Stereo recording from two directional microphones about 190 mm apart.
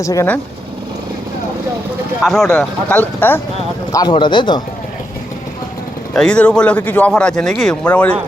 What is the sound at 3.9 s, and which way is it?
Speech, 20° left (ahead or behind).